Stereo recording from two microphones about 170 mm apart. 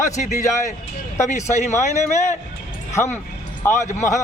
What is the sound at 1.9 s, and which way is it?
Speech, 45° left (ahead or behind).